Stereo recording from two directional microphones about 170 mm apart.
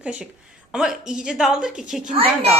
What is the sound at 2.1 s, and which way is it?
Speech, 35° right (ahead or behind).